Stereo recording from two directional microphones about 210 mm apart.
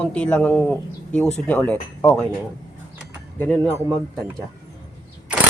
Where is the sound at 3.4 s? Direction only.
5° left (ahead or behind).